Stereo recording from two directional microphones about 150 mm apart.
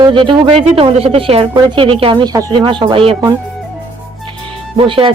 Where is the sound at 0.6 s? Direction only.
45° right (ahead or behind).